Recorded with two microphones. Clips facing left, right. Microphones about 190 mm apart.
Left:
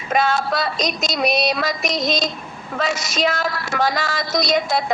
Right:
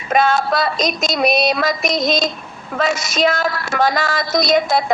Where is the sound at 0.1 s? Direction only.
55° right (ahead or behind).